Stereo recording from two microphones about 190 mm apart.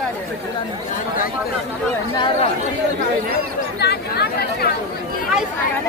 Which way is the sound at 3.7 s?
60° left (ahead or behind).